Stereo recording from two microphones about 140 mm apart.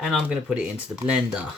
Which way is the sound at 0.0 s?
5° right (ahead or behind).